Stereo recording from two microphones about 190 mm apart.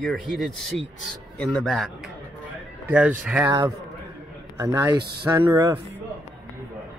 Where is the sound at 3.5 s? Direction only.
20° right (ahead or behind).